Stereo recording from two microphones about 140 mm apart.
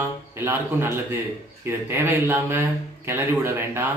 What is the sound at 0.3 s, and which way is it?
Speech, 15° right (ahead or behind).